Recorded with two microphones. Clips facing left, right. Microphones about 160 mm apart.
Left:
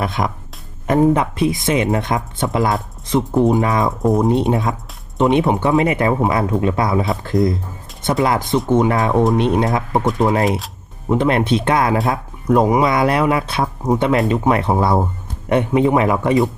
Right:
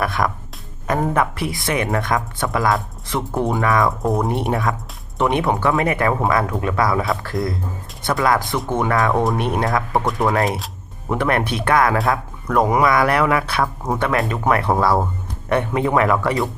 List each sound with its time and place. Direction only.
0.0 s speech: 20° left (ahead or behind)